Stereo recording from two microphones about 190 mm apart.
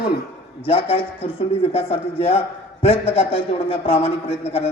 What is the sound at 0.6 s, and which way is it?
A man's voice, 30° left (ahead or behind).